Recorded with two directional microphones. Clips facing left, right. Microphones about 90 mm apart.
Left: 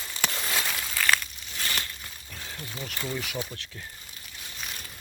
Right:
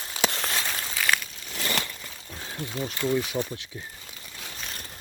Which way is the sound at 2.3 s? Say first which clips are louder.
Right 6 dB; 25° right (ahead or behind).